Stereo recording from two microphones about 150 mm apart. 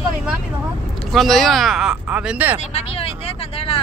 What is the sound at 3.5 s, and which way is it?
Vehicle, 40° left (ahead or behind).